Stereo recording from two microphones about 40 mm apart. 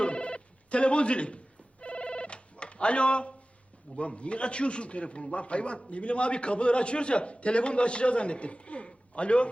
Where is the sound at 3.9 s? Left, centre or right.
Left.